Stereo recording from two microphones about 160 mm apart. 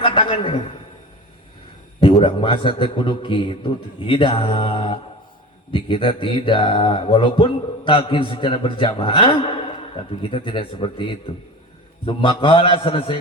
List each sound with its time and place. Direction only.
0.0 s a man's voice: 30° left (ahead or behind)
2.1 s speech: 30° left (ahead or behind)